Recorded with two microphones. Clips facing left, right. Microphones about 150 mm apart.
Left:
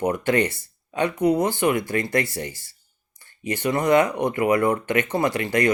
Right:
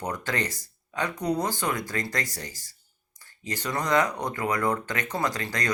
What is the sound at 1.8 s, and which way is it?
Speech, 40° right (ahead or behind).